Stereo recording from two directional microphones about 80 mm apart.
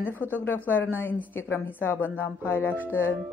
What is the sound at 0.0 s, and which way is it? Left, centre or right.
A woman's voice, left.